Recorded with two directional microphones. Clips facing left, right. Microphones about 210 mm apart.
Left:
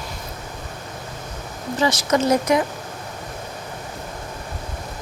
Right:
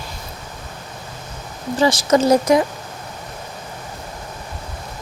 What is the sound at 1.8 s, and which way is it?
Speech, 30° right (ahead or behind).